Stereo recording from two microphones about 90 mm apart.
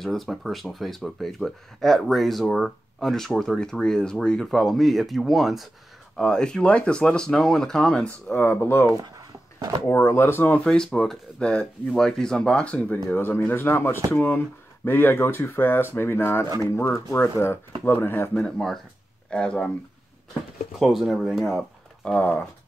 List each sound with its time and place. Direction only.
0.0 s speech: centre (ahead or behind)
8.4 s speech: 25° left (ahead or behind)
8.9 s a sound: 45° right (ahead or behind)
9.8 s speech: 30° left (ahead or behind)
10.6 s speech: 10° left (ahead or behind); by 18.3 s 25° left (ahead or behind)
18.3 s speech: 5° left (ahead or behind)
20.8 s speech: centre (ahead or behind)
22.0 s speech: 15° left (ahead or behind)